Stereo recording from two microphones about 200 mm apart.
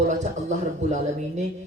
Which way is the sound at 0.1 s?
35° right (ahead or behind).